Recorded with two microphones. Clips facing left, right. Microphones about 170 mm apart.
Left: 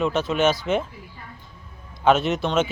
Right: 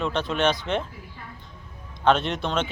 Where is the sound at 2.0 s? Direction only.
5° left (ahead or behind).